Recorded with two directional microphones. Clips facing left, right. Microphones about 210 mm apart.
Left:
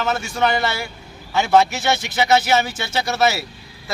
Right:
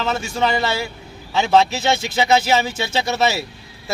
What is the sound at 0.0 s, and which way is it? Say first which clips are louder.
A man's voice: even; 25° right (ahead or behind).